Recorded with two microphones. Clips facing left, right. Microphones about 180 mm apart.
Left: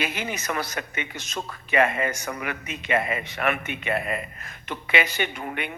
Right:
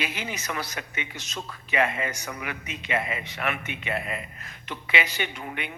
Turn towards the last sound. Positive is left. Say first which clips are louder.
# left 3 dB
turn(degrees=55)  # may be behind; listen again after turning